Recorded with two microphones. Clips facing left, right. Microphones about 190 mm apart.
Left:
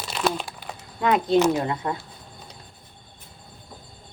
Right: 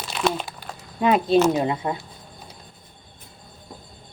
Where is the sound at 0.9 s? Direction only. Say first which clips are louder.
Right 2 dB; 20° right (ahead or behind).